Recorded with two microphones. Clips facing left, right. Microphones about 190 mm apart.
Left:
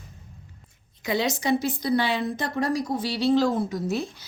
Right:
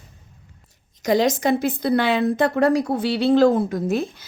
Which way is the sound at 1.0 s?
45° right (ahead or behind).